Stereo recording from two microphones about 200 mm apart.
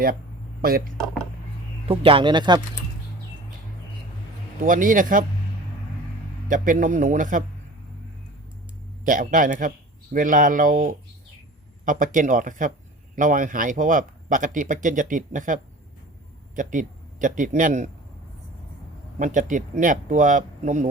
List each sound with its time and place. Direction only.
0.6 s speech: 45° right (ahead or behind)
0.9 s speech: centre (ahead or behind)
1.9 s speech: 25° right (ahead or behind)
4.6 s speech: 40° right (ahead or behind)
6.5 s speech: 40° right (ahead or behind)
9.0 s a man's voice: 40° right (ahead or behind)
19.2 s speech: 40° right (ahead or behind)